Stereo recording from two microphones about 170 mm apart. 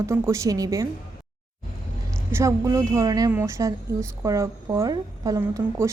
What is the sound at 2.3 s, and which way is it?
A woman's voice, 20° right (ahead or behind).